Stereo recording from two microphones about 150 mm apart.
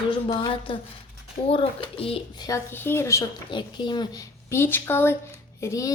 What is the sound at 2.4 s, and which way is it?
Speech, 15° left (ahead or behind).